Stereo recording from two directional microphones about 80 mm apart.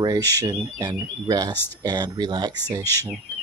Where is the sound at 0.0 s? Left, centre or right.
Right.